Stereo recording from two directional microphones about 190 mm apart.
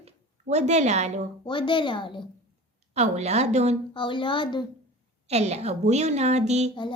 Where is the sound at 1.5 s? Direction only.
25° left (ahead or behind).